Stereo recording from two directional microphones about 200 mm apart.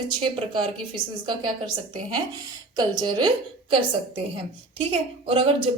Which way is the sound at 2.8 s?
20° right (ahead or behind).